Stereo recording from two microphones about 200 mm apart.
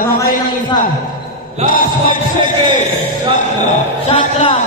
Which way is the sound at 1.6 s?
45° left (ahead or behind).